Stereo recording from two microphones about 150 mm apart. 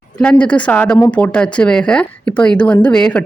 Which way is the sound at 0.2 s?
5° left (ahead or behind).